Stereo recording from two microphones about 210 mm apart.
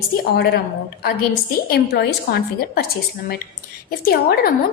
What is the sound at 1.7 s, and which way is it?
A woman's voice, 50° left (ahead or behind).